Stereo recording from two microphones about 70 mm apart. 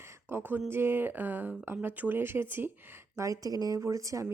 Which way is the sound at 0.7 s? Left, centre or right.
Right.